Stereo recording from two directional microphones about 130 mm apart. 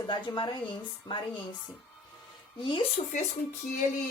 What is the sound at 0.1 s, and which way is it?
Speech, 35° left (ahead or behind).